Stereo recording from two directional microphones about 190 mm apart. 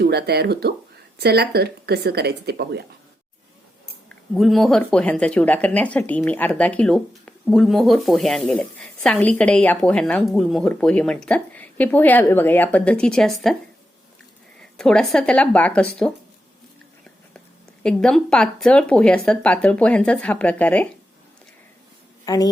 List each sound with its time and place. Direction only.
0.0 s speech: 60° right (ahead or behind)
4.1 s speech: centre (ahead or behind)
14.8 s speech: 5° left (ahead or behind)
17.8 s speech: 5° left (ahead or behind)
22.3 s a woman's voice: 20° left (ahead or behind)